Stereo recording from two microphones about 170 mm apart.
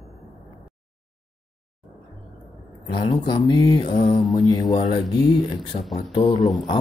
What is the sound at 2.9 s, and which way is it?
Speech, 30° left (ahead or behind).